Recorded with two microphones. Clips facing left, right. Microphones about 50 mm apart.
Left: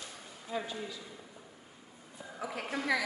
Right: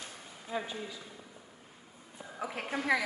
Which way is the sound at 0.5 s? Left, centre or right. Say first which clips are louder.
Even; right.